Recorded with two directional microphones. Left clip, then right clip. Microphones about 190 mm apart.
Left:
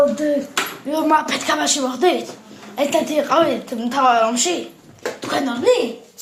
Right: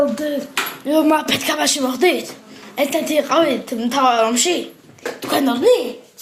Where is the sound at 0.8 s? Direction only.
30° right (ahead or behind).